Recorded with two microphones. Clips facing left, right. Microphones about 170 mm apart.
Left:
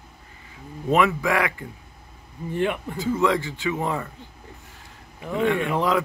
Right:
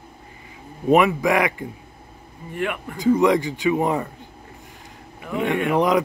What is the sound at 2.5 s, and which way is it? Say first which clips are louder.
Speech: left 2 dB; 30° left (ahead or behind).